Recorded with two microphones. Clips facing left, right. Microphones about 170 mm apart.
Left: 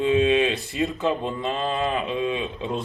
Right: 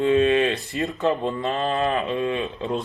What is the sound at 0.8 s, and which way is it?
Speech, centre (ahead or behind).